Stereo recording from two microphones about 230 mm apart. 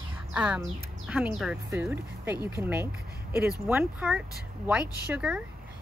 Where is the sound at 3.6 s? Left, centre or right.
Centre.